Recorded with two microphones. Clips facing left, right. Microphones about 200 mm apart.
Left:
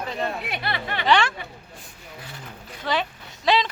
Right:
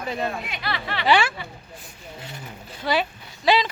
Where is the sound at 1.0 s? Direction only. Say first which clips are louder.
Right 1 dB; 5° right (ahead or behind).